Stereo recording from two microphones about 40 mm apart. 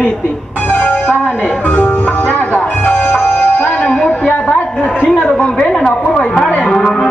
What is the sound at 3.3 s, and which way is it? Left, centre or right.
Music, left.